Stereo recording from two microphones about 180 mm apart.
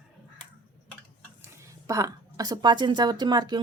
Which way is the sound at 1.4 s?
15° right (ahead or behind).